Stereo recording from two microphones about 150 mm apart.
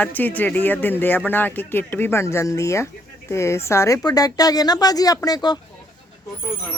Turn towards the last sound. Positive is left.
turn(degrees=25)  # may be behind; listen again after turning